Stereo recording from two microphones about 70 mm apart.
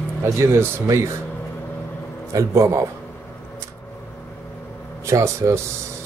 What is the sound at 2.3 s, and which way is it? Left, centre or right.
Speech, right.